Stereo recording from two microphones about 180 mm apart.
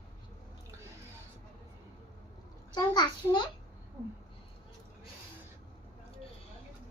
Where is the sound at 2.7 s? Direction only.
25° left (ahead or behind).